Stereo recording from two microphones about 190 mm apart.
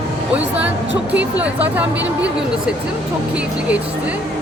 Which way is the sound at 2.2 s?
5° right (ahead or behind).